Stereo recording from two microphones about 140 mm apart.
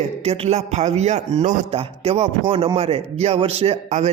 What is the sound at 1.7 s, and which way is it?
Speech, 45° right (ahead or behind).